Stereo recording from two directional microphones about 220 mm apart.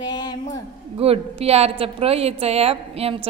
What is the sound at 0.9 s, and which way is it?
A woman's voice, 25° right (ahead or behind).